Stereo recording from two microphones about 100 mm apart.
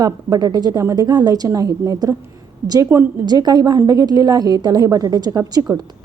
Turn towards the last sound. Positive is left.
turn(degrees=-40)  # may be behind; listen again after turning